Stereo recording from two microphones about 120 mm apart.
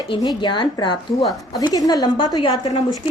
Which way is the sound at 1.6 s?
35° left (ahead or behind).